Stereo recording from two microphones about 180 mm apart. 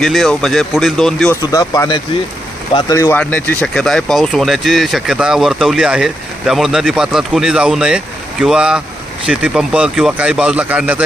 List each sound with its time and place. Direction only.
0.0 s speech: centre (ahead or behind)
1.4 s speech: 20° left (ahead or behind); by 11.0 s 10° right (ahead or behind)